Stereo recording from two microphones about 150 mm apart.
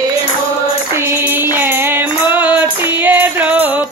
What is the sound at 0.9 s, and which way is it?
Music, 15° right (ahead or behind).